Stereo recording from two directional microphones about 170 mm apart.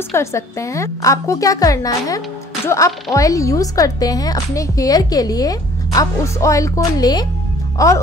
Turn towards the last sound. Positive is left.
turn(degrees=20)  # may be behind; listen again after turning